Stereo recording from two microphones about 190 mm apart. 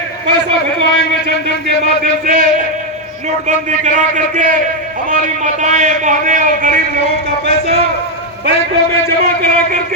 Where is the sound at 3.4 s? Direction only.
40° right (ahead or behind).